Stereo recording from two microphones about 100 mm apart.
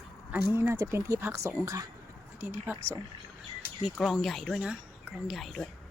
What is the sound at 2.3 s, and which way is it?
Speech, 20° right (ahead or behind).